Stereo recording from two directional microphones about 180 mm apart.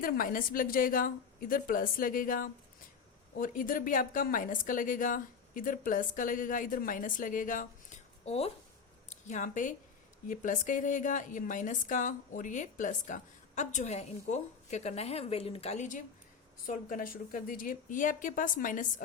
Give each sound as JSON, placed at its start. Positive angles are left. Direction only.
{"t": 0.0, "sound": "a woman's voice", "side_deg": 50}